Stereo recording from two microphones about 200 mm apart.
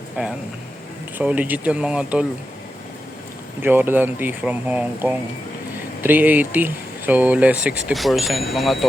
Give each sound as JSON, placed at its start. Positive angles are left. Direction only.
{"t": 0.2, "sound": "speech", "side_deg": -5}
{"t": 3.6, "sound": "speech", "side_deg": -10}